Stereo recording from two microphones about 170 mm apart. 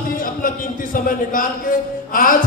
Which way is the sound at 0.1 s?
55° left (ahead or behind).